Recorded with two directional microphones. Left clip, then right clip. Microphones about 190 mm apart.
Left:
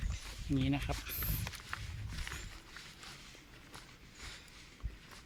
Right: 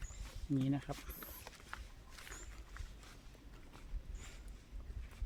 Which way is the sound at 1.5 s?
40° left (ahead or behind).